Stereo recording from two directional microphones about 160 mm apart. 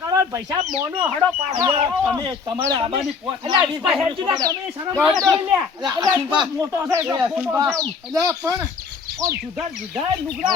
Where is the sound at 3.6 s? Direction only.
5° right (ahead or behind).